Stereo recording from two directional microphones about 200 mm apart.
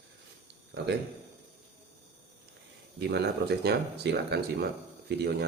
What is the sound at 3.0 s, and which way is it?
Speech, 55° right (ahead or behind).